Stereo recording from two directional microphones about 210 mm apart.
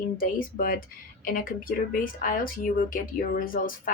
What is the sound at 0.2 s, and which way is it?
Speech, 45° left (ahead or behind).